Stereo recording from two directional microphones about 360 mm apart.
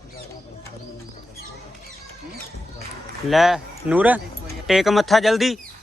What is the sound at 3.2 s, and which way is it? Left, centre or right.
Speech, centre.